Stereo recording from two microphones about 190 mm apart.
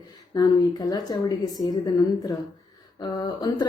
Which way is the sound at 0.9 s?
20° left (ahead or behind).